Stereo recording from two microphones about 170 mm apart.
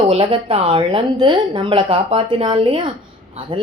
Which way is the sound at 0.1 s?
35° right (ahead or behind).